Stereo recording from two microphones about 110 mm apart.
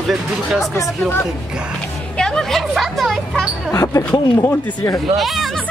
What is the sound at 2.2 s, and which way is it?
Music, 5° left (ahead or behind).